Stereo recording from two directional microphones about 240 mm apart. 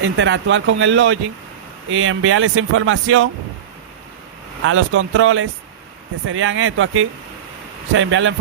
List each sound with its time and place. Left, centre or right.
0.0 s speech: right
4.6 s speech: right